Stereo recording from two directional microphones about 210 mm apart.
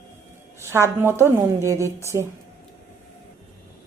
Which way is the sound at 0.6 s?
10° right (ahead or behind).